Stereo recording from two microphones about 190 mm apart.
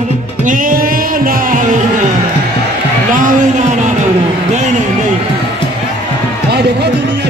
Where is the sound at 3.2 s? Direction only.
40° right (ahead or behind).